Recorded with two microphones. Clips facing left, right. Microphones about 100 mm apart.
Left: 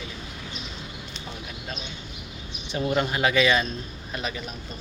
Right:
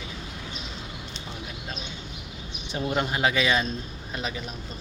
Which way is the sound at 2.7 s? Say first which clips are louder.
Left 2 dB; 20° right (ahead or behind).